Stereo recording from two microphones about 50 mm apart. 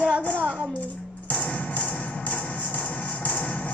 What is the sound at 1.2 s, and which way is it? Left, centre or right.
Music, left.